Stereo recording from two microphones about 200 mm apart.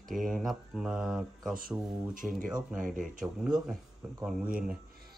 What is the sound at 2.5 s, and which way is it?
Speech, 5° right (ahead or behind).